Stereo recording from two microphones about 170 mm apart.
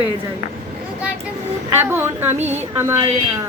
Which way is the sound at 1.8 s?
15° right (ahead or behind).